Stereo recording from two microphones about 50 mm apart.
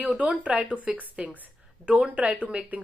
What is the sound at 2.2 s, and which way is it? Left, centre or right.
Speech, right.